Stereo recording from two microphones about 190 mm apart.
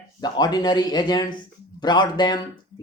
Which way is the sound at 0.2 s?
20° left (ahead or behind).